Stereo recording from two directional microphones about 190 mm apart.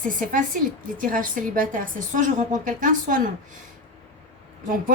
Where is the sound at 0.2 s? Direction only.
45° right (ahead or behind).